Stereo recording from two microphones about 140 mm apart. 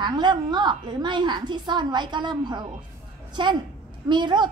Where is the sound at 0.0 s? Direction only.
30° right (ahead or behind).